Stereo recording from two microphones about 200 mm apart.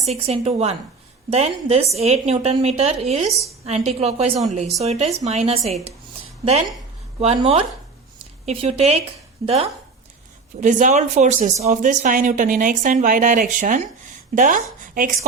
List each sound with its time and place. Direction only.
0.0 s speech: 30° right (ahead or behind)
7.2 s speech: 30° right (ahead or behind)
10.6 s speech: 40° right (ahead or behind)